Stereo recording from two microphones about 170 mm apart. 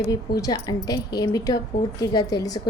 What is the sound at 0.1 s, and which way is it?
A woman's voice, 20° left (ahead or behind).